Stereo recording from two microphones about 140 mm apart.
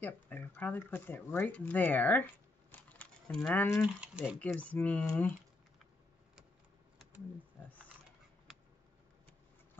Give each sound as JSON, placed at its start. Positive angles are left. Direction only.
{"t": 0.0, "sound": "speech", "side_deg": 15}
{"t": 2.7, "sound": "a sound", "side_deg": 10}
{"t": 4.0, "sound": "speech", "side_deg": -10}
{"t": 4.4, "sound": "speech", "side_deg": 10}